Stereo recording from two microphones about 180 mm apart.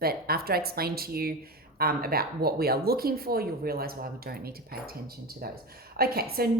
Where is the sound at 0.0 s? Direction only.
60° right (ahead or behind).